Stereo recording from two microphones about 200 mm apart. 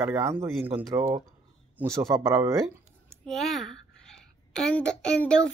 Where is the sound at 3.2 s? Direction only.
Centre (ahead or behind).